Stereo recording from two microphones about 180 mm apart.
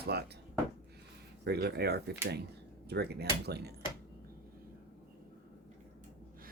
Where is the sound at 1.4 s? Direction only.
65° right (ahead or behind).